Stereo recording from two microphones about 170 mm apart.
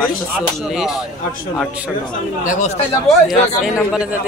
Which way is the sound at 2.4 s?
45° left (ahead or behind).